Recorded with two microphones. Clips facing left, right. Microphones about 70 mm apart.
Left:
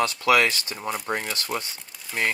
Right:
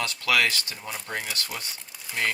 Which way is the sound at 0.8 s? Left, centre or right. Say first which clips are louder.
Left 7 dB; left.